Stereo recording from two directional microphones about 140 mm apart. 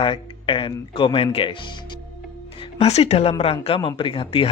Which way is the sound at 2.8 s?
50° left (ahead or behind).